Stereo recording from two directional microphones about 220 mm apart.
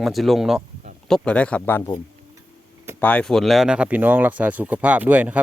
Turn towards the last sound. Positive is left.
turn(degrees=-5)  # may be behind; listen again after turning